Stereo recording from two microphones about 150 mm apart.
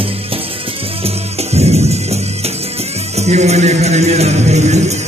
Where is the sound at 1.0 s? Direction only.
45° right (ahead or behind).